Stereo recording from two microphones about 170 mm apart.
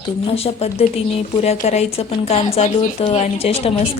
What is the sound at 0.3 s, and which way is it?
A woman's voice, 35° left (ahead or behind).